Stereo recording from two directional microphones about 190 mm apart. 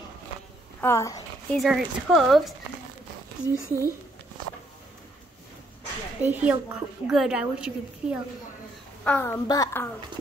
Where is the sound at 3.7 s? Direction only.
15° left (ahead or behind).